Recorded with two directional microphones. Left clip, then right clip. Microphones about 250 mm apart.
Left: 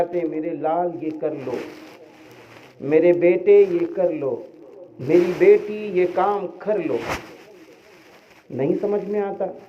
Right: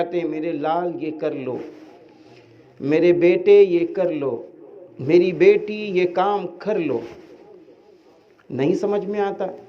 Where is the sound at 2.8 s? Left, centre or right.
Right.